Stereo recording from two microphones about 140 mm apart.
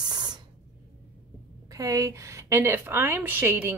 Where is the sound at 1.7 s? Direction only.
25° right (ahead or behind).